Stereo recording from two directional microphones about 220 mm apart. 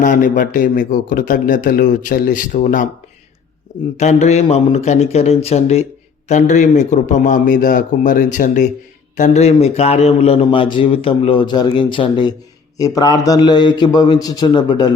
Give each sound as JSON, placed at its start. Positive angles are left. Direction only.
{"t": 0.0, "sound": "a man's voice", "side_deg": 35}
{"t": 3.9, "sound": "a man's voice", "side_deg": 30}